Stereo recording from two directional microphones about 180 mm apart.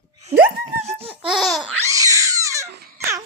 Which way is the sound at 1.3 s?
Centre (ahead or behind).